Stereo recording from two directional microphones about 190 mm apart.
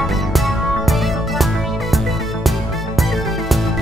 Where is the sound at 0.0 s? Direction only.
Centre (ahead or behind).